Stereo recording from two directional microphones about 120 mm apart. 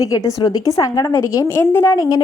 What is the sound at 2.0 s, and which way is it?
Speech, 30° left (ahead or behind).